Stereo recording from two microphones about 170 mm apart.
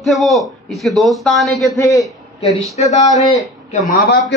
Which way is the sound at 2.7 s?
40° left (ahead or behind).